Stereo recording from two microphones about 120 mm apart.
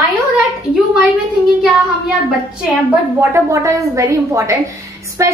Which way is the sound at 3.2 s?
25° right (ahead or behind).